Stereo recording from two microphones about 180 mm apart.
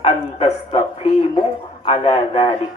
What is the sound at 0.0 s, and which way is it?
Speech, 35° left (ahead or behind).